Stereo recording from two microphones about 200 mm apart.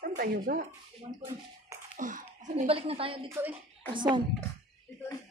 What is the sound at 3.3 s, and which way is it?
Speech, 10° right (ahead or behind).